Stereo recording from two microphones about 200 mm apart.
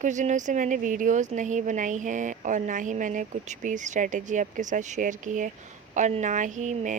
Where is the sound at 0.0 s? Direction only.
40° right (ahead or behind).